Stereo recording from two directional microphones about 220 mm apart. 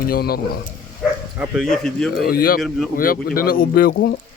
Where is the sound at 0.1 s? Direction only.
45° left (ahead or behind).